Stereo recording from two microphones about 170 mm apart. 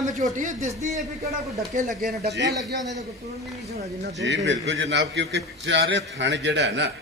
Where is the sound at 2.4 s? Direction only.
20° right (ahead or behind).